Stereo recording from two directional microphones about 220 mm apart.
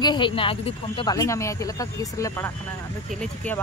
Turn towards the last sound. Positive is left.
turn(degrees=5)  # may be behind; listen again after turning